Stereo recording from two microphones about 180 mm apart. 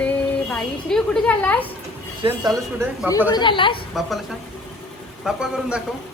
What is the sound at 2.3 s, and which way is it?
Speech, 15° right (ahead or behind).